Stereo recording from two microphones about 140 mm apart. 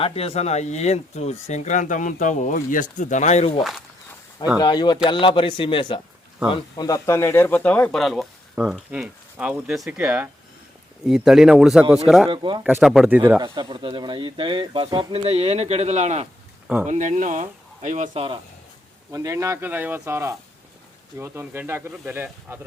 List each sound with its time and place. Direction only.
0.0 s speech: 45° left (ahead or behind)
4.6 s a man's voice: 30° left (ahead or behind); by 12.3 s centre (ahead or behind)
12.3 s speech: 35° right (ahead or behind)
12.6 s speech: 5° right (ahead or behind)
13.4 s speech: 30° right (ahead or behind); by 18.1 s 65° right (ahead or behind)
18.1 s speech: 45° right (ahead or behind)
19.1 s speech: 25° right (ahead or behind)